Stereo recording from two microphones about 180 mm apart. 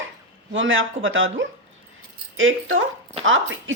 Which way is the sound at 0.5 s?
90° right.